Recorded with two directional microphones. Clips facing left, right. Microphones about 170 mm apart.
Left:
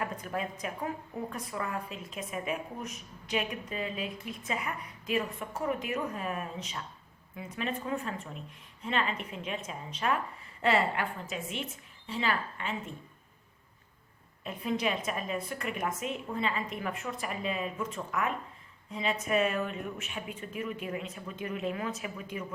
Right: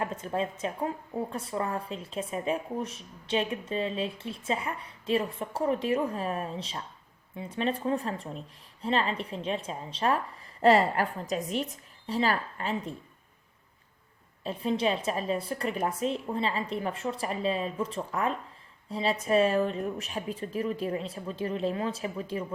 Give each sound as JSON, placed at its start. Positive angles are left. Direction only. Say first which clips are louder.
{"t": 0.0, "sound": "a woman's voice", "louder": "right 4 dB", "side_deg": -25}
{"t": 14.4, "sound": "a woman's voice", "louder": "right 4 dB", "side_deg": -30}